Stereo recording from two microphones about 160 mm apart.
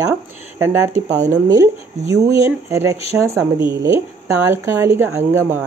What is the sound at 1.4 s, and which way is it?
Speech, 25° right (ahead or behind).